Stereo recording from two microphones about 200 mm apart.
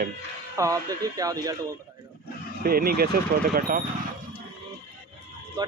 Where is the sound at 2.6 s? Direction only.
50° right (ahead or behind).